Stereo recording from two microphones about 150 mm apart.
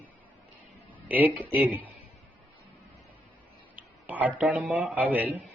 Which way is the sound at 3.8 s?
10° right (ahead or behind).